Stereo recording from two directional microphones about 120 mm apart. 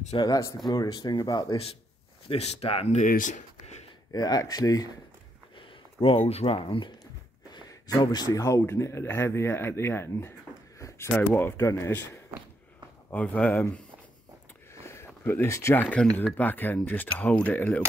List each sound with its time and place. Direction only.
0.2 s speech: 30° left (ahead or behind)
2.2 s speech: 60° left (ahead or behind); by 3.8 s 90° left
4.1 s speech: 35° left (ahead or behind)
5.9 s speech: 50° left (ahead or behind)
7.5 s speech: 30° left (ahead or behind); by 13.7 s 15° left (ahead or behind)
14.9 s speech: 20° left (ahead or behind)